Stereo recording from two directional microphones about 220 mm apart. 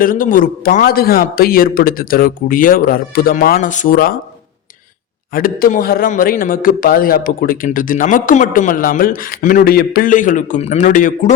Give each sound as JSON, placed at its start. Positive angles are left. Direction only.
{"t": 0.0, "sound": "a man's voice", "side_deg": 40}
{"t": 5.3, "sound": "a man's voice", "side_deg": 40}